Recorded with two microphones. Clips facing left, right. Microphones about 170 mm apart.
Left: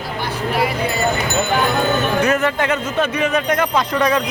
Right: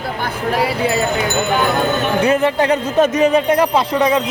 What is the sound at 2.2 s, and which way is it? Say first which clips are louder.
Speech: right 3 dB; 30° right (ahead or behind).